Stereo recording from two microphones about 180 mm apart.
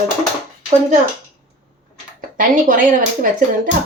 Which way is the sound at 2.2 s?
50° right (ahead or behind).